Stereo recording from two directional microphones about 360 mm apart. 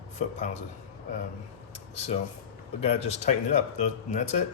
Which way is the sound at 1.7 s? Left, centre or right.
Centre.